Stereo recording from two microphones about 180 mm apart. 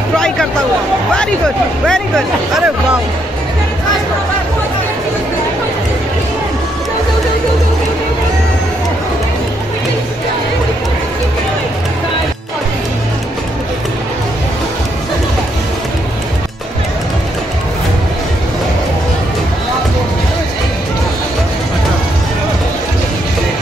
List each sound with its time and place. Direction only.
1.9 s speech: 5° left (ahead or behind)